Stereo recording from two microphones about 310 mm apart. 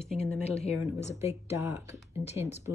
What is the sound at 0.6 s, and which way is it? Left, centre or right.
Speech, left.